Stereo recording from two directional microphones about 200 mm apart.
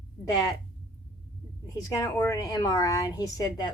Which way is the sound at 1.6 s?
15° left (ahead or behind).